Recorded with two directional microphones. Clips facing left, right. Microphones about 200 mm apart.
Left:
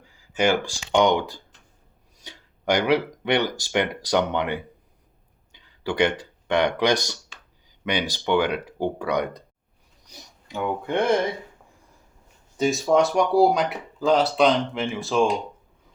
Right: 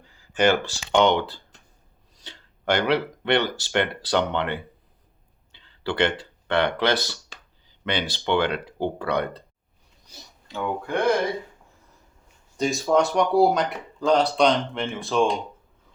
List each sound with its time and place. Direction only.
0.0 s speech: 10° left (ahead or behind)
12.5 s speech: centre (ahead or behind)